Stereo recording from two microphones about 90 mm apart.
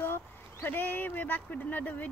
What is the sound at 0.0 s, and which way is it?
Speech, 25° left (ahead or behind).